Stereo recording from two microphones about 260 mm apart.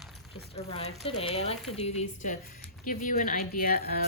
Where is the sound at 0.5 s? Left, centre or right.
Left.